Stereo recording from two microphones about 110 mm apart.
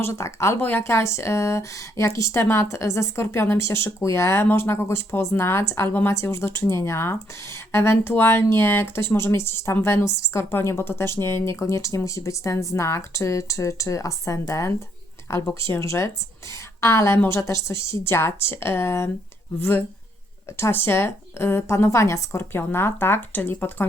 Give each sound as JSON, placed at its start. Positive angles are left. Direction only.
{"t": 0.0, "sound": "speech", "side_deg": 25}